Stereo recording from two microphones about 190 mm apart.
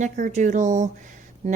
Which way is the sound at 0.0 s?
40° right (ahead or behind).